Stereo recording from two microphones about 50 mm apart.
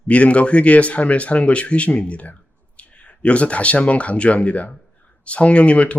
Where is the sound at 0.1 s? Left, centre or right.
Left.